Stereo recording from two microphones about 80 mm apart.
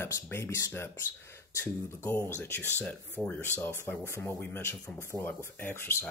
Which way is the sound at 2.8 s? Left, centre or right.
Centre.